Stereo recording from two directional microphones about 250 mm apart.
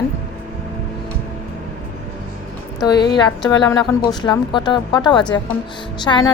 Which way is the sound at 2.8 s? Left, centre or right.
Centre.